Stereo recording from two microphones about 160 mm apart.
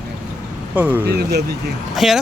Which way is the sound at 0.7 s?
10° right (ahead or behind).